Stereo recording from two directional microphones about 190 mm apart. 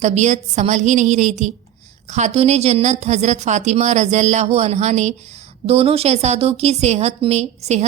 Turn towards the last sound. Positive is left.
turn(degrees=-35)  # may be behind; listen again after turning